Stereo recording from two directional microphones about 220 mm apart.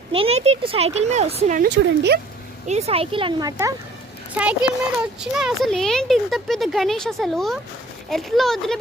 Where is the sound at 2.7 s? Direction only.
30° right (ahead or behind).